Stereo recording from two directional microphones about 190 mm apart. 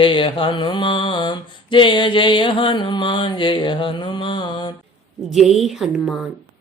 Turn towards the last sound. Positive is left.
turn(degrees=0)  # may be behind; listen again after turning